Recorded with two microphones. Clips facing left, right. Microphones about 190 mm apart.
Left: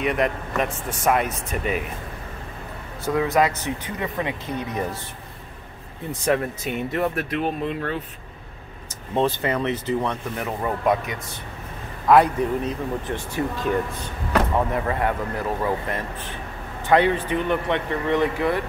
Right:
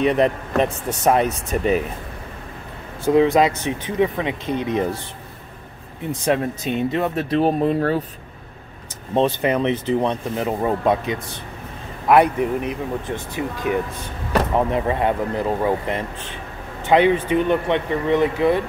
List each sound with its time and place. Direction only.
0.0 s speech: 30° right (ahead or behind)
3.1 s speech: 20° right (ahead or behind)
6.2 s speech: 20° right (ahead or behind)
9.1 s a man's voice: 20° right (ahead or behind)
14.5 s speech: 20° right (ahead or behind)